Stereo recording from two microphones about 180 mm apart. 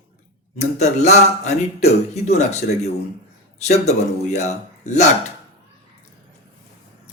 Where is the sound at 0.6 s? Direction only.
40° left (ahead or behind).